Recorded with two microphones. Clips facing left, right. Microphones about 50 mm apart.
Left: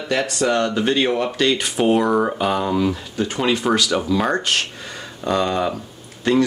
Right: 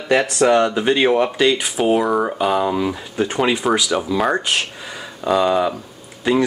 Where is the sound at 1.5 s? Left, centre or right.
Centre.